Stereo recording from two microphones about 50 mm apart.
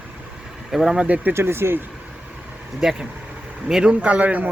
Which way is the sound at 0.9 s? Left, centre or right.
Right.